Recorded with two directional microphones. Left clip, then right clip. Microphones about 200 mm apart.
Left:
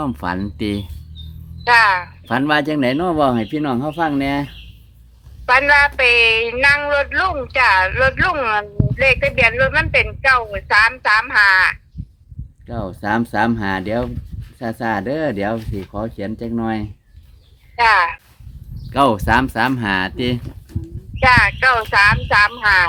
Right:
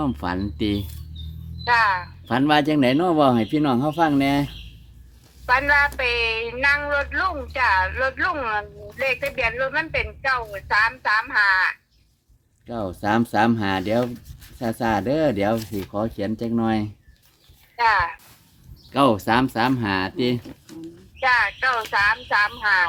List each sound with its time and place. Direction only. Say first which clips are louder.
0.0 s speech: left 3 dB; 15° left (ahead or behind)
1.6 s speech: left 6 dB; 40° left (ahead or behind)
2.2 s speech: left 1 dB; 15° left (ahead or behind)
5.5 s speech: left 6 dB; 40° left (ahead or behind)
12.6 s speech: left 2 dB; 5° left (ahead or behind)
17.7 s speech: left 6 dB; 40° left (ahead or behind)
18.9 s speech: left 4 dB; 15° left (ahead or behind)
20.7 s speech: left 3 dB; 25° right (ahead or behind)
21.2 s speech: left 7 dB; 40° left (ahead or behind)